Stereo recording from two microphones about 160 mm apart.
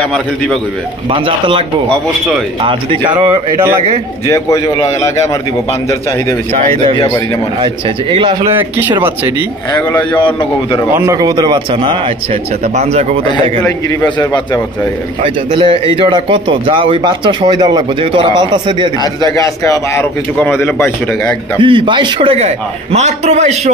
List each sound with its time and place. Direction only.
1.1 s a man's voice: 35° right (ahead or behind)
2.6 s a man's voice: 30° right (ahead or behind)
4.3 s a man's voice: 20° left (ahead or behind)
7.6 s a man's voice: 30° right (ahead or behind)
10.1 s a man's voice: 30° left (ahead or behind)
10.9 s a man's voice: 15° right (ahead or behind)
12.7 s a man's voice: 45° right (ahead or behind)
13.7 s a man's voice: 20° left (ahead or behind)
15.2 s a man's voice: 35° right (ahead or behind)
19.2 s a man's voice: 20° left (ahead or behind)
21.5 s a man's voice: 30° right (ahead or behind)